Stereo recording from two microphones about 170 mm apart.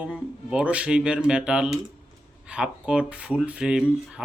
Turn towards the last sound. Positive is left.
turn(degrees=-5)  # may be behind; listen again after turning